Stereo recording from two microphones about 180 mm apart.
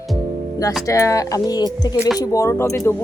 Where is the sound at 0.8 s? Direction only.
15° left (ahead or behind).